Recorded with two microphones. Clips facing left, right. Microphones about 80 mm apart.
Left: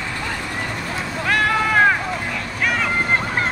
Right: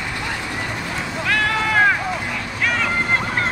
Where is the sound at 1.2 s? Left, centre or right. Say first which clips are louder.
Left 2 dB; centre.